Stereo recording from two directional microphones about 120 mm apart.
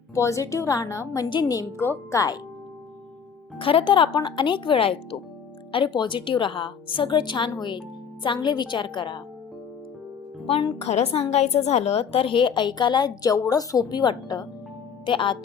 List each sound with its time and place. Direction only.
0.1 s a woman's voice: 25° left (ahead or behind)
1.8 s a woman's voice: 20° left (ahead or behind)
3.6 s a woman's voice: 45° left (ahead or behind)
10.4 s speech: 55° left (ahead or behind)
10.8 s a woman's voice: 65° left (ahead or behind); by 15.4 s 45° left (ahead or behind)